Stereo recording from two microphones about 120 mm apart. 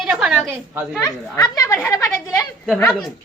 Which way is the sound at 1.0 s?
30° left (ahead or behind).